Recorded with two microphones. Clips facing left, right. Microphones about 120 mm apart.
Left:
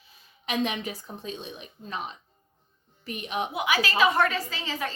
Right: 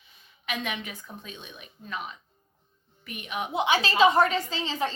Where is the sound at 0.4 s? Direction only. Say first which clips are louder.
Left 5 dB; 35° left (ahead or behind).